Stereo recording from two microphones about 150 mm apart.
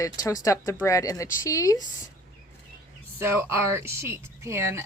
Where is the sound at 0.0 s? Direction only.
25° left (ahead or behind).